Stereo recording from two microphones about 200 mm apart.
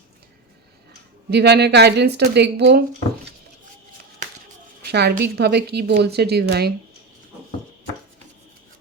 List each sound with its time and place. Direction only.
1.3 s speech: 55° right (ahead or behind)
4.9 s speech: 55° right (ahead or behind)